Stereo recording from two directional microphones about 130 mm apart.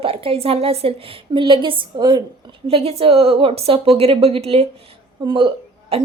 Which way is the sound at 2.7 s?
50° right (ahead or behind).